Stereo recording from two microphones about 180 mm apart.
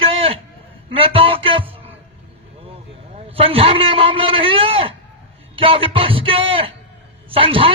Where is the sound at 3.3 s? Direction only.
30° right (ahead or behind).